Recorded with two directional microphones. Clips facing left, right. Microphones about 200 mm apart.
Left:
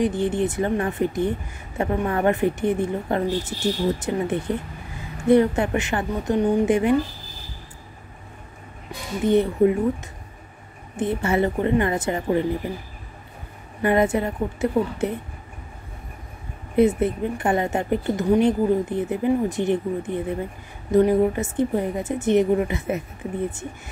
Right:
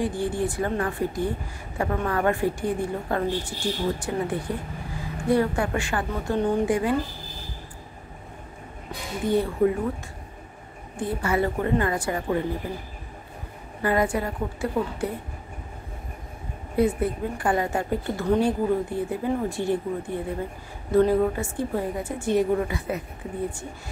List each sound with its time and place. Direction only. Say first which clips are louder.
0.0 s a woman's voice: left 4 dB; 20° left (ahead or behind)
9.2 s a woman's voice: left 4 dB; 20° left (ahead or behind)
11.0 s a woman's voice: left 3 dB; 25° left (ahead or behind)
13.8 s a woman's voice: left 4 dB; 25° left (ahead or behind)
16.7 s a woman's voice: left 4 dB; 20° left (ahead or behind)